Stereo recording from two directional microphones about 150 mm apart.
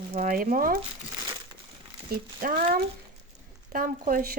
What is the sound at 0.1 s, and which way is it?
Speech, 65° right (ahead or behind).